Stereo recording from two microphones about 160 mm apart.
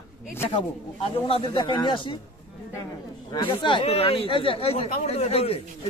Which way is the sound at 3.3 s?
30° left (ahead or behind).